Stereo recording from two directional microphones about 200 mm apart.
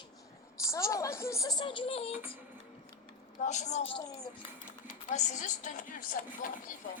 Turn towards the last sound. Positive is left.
turn(degrees=40)  # may be behind; listen again after turning